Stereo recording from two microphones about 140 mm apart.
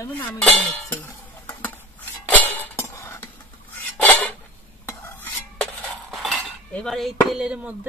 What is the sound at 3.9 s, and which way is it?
Dishes, 10° left (ahead or behind).